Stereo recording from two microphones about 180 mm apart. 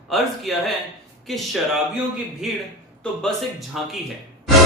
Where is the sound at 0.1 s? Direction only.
Centre (ahead or behind).